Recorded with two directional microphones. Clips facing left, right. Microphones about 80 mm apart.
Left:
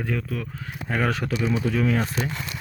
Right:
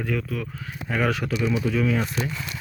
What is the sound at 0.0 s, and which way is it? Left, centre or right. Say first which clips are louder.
Speech: right 1 dB; left.